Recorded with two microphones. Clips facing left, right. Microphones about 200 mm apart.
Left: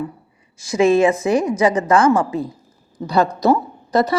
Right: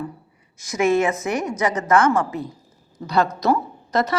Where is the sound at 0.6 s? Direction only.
30° left (ahead or behind).